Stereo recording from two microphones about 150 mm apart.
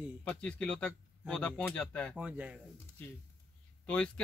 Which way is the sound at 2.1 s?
10° right (ahead or behind).